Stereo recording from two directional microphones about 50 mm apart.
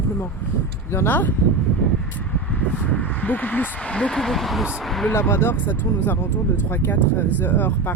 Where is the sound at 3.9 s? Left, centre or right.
Left.